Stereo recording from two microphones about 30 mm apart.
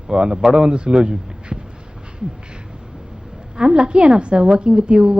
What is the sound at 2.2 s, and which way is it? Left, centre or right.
Owl, right.